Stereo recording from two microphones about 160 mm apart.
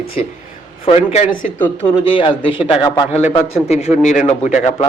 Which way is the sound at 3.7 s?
40° left (ahead or behind).